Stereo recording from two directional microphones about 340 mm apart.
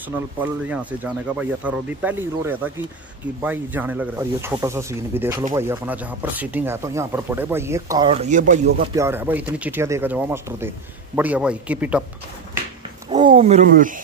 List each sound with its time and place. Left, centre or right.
0.1 s speech: centre; by 8.8 s right
8.9 s speech: centre
13.1 s speech: centre